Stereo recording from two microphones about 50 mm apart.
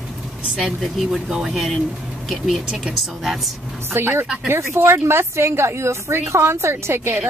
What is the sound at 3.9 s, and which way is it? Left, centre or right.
A woman's voice, right.